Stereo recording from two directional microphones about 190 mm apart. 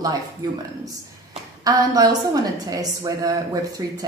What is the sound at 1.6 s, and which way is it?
A woman's voice, 20° right (ahead or behind).